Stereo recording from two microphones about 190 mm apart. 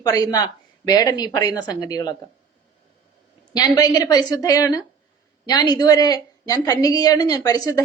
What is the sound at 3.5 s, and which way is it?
A woman's voice, 20° left (ahead or behind).